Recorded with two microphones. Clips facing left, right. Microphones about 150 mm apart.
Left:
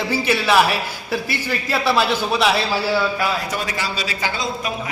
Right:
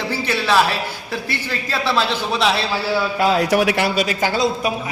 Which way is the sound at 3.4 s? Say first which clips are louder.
Right 9 dB; 75° right (ahead or behind).